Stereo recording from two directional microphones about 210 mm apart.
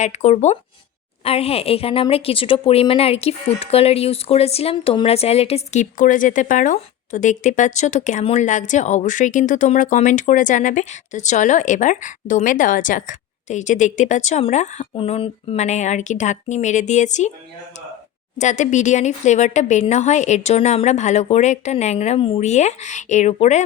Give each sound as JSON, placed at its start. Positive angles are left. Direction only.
{"t": 0.0, "sound": "a woman's voice", "side_deg": 30}
{"t": 18.3, "sound": "a woman's voice", "side_deg": 35}